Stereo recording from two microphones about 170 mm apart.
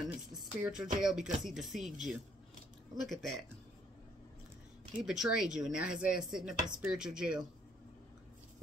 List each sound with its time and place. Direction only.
0.3 s speech: 5° right (ahead or behind)
5.0 s speech: 5° right (ahead or behind)